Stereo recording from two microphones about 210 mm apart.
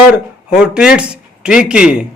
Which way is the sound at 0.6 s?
5° right (ahead or behind).